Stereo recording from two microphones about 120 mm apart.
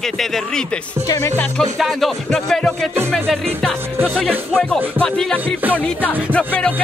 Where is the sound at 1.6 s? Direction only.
Centre (ahead or behind).